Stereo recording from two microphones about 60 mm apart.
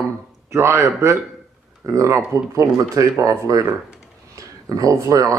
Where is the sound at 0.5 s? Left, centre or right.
Right.